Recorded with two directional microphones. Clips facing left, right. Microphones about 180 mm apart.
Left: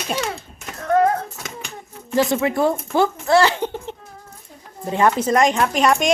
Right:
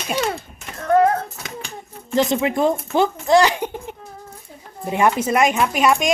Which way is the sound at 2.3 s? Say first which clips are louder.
Even; 20° right (ahead or behind).